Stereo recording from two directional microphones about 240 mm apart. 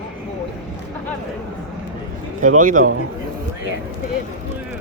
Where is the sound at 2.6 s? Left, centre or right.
Right.